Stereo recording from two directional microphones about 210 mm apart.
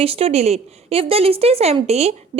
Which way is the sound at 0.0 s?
30° right (ahead or behind).